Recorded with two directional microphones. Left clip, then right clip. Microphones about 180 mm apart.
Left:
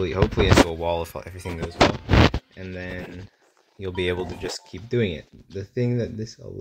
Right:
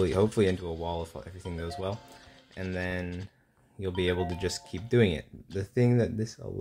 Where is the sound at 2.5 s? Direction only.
60° right (ahead or behind).